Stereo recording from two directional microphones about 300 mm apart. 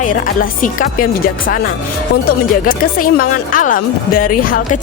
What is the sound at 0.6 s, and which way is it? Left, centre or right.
Speech, left.